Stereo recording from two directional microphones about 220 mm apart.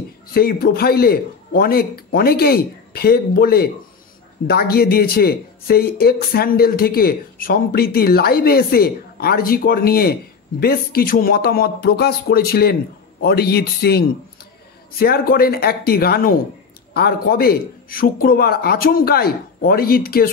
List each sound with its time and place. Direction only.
0.3 s speech: 45° left (ahead or behind)